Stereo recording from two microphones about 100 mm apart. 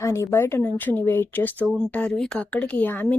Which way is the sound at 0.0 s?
30° left (ahead or behind).